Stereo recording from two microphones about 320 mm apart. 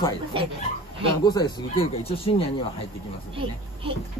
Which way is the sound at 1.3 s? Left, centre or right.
Centre.